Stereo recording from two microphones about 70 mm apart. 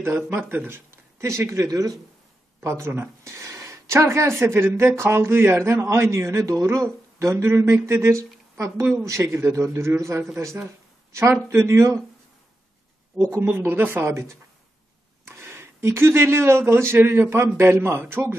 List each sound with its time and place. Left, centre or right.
0.0 s speech: right
2.6 s a man's voice: right
13.2 s speech: right
15.2 s speech: right